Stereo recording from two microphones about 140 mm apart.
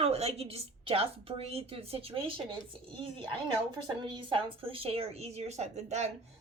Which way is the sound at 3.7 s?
35° right (ahead or behind).